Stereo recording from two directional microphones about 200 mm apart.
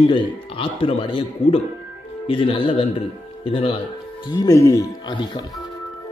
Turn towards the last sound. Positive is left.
turn(degrees=20)  # may be behind; listen again after turning